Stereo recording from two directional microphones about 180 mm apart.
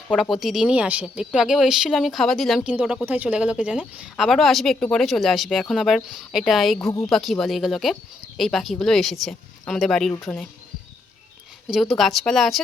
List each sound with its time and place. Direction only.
0.1 s speech: centre (ahead or behind)
6.7 s a woman's voice: 15° left (ahead or behind)
7.1 s speech: centre (ahead or behind)
11.7 s speech: centre (ahead or behind)